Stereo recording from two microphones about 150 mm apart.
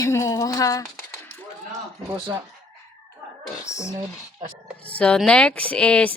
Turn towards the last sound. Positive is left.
turn(degrees=10)  # may be behind; listen again after turning